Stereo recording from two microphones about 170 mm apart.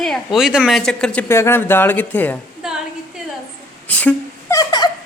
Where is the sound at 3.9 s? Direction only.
10° left (ahead or behind).